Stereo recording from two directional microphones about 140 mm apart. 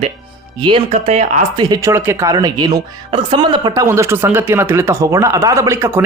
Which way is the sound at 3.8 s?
20° right (ahead or behind).